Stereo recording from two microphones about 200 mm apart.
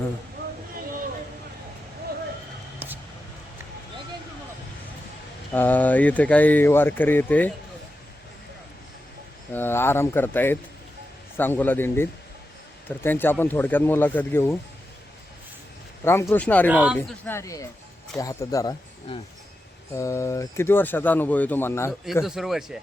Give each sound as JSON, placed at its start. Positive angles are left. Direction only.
{"t": 5.5, "sound": "speech", "side_deg": 10}
{"t": 9.5, "sound": "speech", "side_deg": 10}
{"t": 16.3, "sound": "speech", "side_deg": 10}
{"t": 16.6, "sound": "speech", "side_deg": -5}
{"t": 17.2, "sound": "speech", "side_deg": 15}
{"t": 19.9, "sound": "speech", "side_deg": 15}
{"t": 22.0, "sound": "speech", "side_deg": 0}